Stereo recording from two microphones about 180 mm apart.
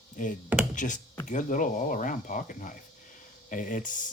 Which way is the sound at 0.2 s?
45° left (ahead or behind).